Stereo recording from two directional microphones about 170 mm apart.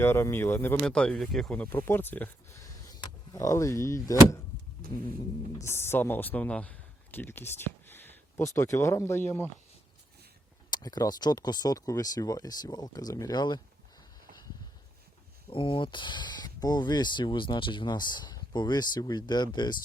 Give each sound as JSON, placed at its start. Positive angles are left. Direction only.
{"t": 0.0, "sound": "speech", "side_deg": 15}
{"t": 5.6, "sound": "speech", "side_deg": 15}
{"t": 10.7, "sound": "speech", "side_deg": 25}
{"t": 15.4, "sound": "speech", "side_deg": 30}